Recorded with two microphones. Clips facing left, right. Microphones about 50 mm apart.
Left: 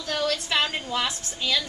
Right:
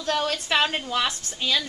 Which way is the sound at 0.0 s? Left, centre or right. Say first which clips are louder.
Right 1 dB; right.